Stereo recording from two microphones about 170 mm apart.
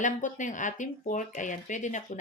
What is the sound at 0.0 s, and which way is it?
Speech, 50° left (ahead or behind).